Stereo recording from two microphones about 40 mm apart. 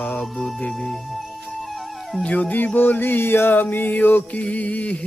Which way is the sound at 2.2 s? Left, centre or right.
Left.